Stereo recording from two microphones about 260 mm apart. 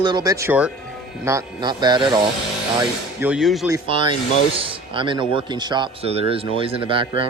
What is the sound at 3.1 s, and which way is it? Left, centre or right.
Speech, centre.